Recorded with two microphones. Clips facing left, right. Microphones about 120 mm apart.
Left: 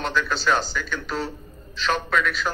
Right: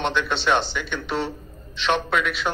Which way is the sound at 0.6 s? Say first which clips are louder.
Right 1 dB; 40° left (ahead or behind).